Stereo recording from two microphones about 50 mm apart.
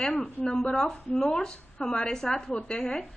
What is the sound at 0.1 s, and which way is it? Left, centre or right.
Speech, left.